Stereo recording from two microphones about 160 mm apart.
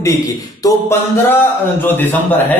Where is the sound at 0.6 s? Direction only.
15° left (ahead or behind).